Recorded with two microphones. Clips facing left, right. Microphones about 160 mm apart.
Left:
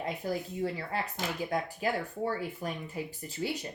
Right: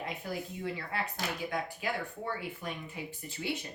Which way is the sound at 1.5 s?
35° left (ahead or behind).